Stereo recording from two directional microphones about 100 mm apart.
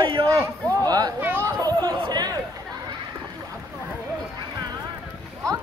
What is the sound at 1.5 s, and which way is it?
Chatter, 40° right (ahead or behind).